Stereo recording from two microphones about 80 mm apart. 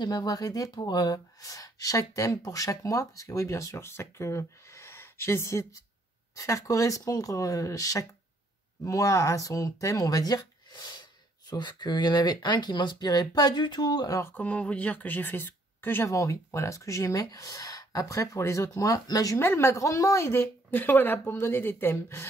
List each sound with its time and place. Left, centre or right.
0.0 s speech: left
14.3 s speech: centre
16.1 s speech: left
19.3 s a woman's voice: left